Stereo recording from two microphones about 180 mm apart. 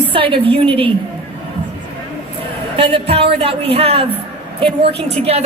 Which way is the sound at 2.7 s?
30° right (ahead or behind).